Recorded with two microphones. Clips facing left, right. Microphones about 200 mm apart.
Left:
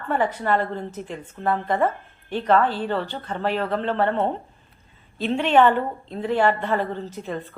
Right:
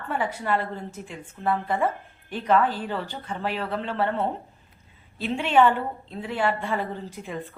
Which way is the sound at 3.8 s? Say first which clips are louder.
Left 4 dB; 50° left (ahead or behind).